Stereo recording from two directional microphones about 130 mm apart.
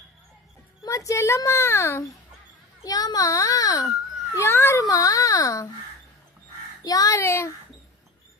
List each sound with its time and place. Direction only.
0.9 s a child's voice: 25° left (ahead or behind)
6.8 s a child's voice: 30° left (ahead or behind)